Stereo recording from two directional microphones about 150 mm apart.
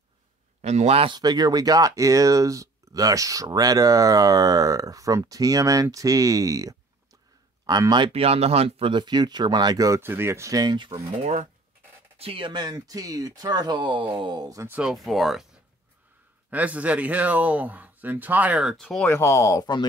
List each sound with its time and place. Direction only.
0.6 s speech: 45° right (ahead or behind); by 8.1 s 30° right (ahead or behind)
8.1 s speech: 40° right (ahead or behind)
12.2 s speech: 35° right (ahead or behind)
14.7 s speech: 5° right (ahead or behind)
16.4 s speech: 10° right (ahead or behind)
19.0 s speech: 20° left (ahead or behind)